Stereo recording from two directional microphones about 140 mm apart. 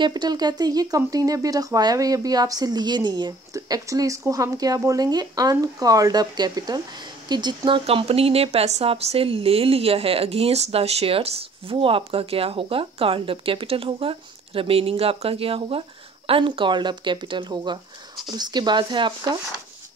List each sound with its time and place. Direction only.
0.0 s speech: 30° right (ahead or behind)